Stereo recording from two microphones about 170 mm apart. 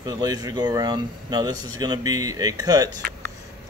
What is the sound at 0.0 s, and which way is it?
Speech, 25° right (ahead or behind).